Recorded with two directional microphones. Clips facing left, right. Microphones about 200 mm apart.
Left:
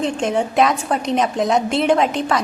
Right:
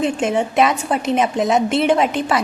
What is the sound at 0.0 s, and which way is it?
A woman's voice, 5° right (ahead or behind).